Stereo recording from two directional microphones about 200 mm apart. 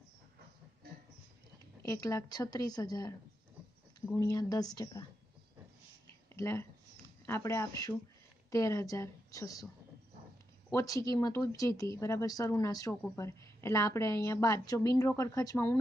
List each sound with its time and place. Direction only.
1.9 s a woman's voice: 15° left (ahead or behind)
6.3 s a woman's voice: 15° left (ahead or behind)
10.7 s a woman's voice: 15° left (ahead or behind)